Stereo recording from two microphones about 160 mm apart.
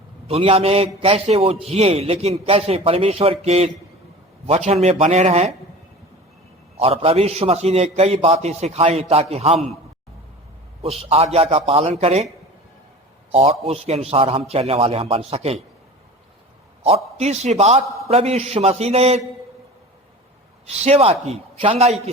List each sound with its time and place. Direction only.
0.3 s a man's voice: 40° right (ahead or behind)
6.7 s a man's voice: 35° right (ahead or behind)
10.8 s a man's voice: 40° right (ahead or behind)
13.3 s a man's voice: 40° right (ahead or behind)
16.8 s a man's voice: 40° right (ahead or behind)
20.8 s a man's voice: 40° right (ahead or behind)